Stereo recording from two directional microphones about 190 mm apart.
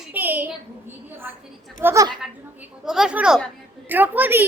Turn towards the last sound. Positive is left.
turn(degrees=-10)  # may be behind; listen again after turning